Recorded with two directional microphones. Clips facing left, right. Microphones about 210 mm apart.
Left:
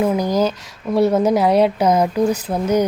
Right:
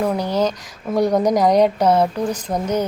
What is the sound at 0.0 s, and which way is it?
A woman's voice, 10° left (ahead or behind).